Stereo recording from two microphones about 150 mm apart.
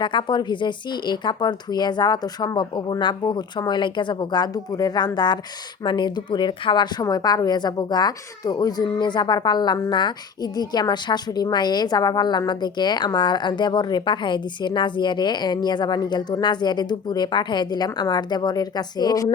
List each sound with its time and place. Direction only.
0.0 s a woman's voice: 30° left (ahead or behind)